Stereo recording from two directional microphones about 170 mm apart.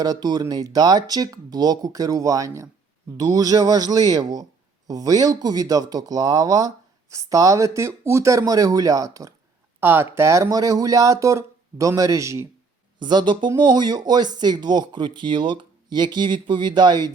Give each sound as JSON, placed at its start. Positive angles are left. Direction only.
{"t": 0.0, "sound": "speech", "side_deg": -25}